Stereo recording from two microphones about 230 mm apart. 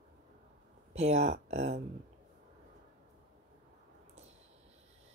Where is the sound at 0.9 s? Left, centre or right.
Right.